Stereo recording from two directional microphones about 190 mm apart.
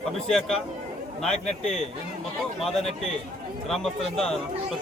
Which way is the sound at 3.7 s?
5° left (ahead or behind).